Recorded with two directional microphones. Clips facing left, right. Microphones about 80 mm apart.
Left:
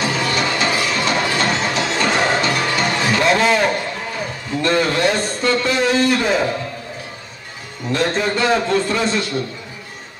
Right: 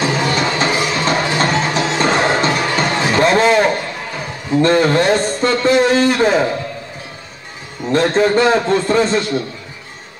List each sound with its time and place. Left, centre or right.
0.0 s music: right
4.6 s a man's voice: right
7.9 s a man's voice: right